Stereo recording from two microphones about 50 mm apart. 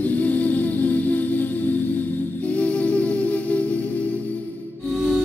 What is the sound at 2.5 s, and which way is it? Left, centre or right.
Music, left.